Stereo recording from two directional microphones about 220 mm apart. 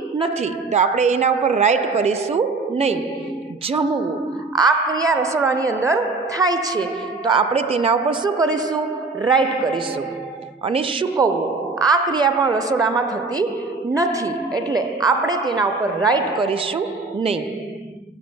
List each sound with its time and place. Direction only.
0.2 s a woman's voice: 30° right (ahead or behind)
4.6 s a woman's voice: 15° right (ahead or behind)
10.6 s a woman's voice: 25° right (ahead or behind)